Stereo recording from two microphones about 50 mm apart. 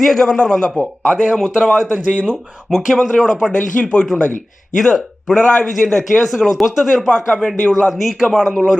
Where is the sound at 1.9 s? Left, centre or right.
Right.